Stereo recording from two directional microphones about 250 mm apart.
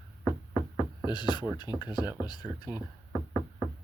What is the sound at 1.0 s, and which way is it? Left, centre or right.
Speech, centre.